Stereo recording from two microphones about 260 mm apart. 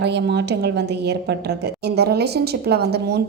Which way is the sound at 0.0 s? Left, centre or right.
Right.